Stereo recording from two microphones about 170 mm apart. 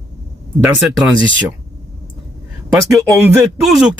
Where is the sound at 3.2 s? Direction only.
5° right (ahead or behind).